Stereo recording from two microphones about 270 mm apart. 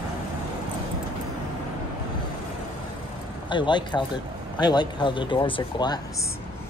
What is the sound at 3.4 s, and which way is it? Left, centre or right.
Speech, centre.